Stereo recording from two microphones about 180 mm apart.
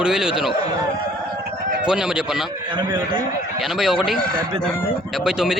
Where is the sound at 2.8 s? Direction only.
25° right (ahead or behind).